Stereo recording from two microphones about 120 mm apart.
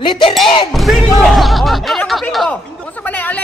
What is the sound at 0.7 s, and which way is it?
Speech, centre (ahead or behind).